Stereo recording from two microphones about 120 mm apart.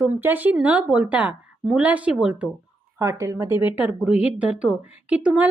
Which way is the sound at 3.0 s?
25° right (ahead or behind).